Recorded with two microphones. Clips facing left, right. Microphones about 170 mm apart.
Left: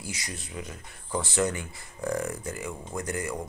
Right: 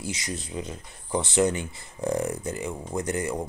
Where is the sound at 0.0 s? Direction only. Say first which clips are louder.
Right 6 dB; 20° right (ahead or behind).